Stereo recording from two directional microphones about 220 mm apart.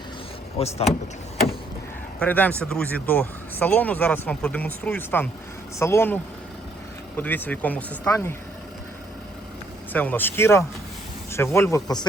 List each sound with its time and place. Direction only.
0.6 s speech: 25° left (ahead or behind)
2.1 s speech: 5° left (ahead or behind)
7.2 s speech: 10° left (ahead or behind)
9.9 s speech: 10° left (ahead or behind)